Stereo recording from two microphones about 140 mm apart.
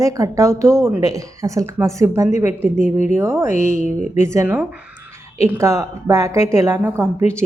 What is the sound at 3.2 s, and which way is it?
A woman's voice, 20° right (ahead or behind).